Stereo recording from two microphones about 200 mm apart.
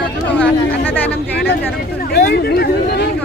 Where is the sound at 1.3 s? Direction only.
55° left (ahead or behind).